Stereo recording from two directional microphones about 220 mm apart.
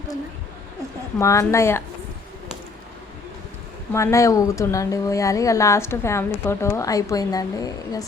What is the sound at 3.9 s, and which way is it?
Speech, 10° left (ahead or behind).